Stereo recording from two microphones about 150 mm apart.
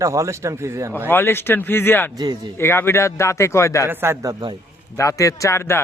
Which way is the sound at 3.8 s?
15° right (ahead or behind).